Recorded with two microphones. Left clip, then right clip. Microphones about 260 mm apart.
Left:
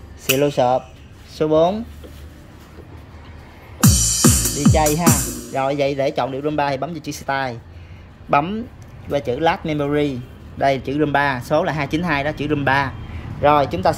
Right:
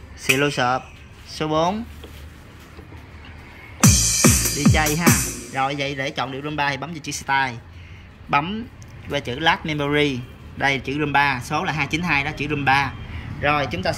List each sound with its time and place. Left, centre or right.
0.2 s speech: centre
3.8 s music: left
5.5 s speech: centre